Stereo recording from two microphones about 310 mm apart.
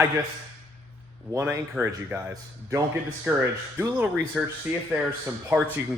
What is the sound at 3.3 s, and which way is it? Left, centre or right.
Speech, centre.